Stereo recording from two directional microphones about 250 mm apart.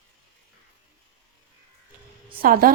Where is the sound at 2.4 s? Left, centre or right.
Right.